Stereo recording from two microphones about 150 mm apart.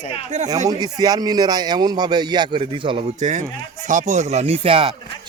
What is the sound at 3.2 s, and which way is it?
A man's voice, 55° right (ahead or behind).